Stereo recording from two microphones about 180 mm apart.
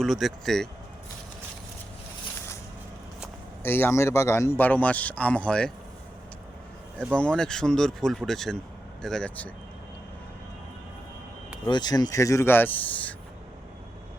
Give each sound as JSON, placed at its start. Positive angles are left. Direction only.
{"t": 0.0, "sound": "speech", "side_deg": 0}
{"t": 3.6, "sound": "speech", "side_deg": 10}
{"t": 7.0, "sound": "speech", "side_deg": 5}
{"t": 11.6, "sound": "speech", "side_deg": 20}